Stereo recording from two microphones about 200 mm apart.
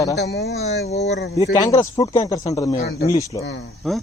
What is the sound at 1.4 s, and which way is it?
Speech, 15° left (ahead or behind).